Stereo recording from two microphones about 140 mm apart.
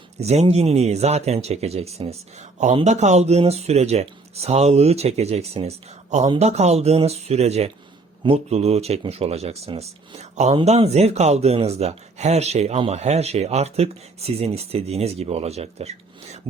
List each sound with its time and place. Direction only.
0.2 s speech: 50° right (ahead or behind)